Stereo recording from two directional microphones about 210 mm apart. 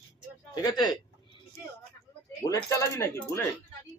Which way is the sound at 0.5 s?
20° left (ahead or behind).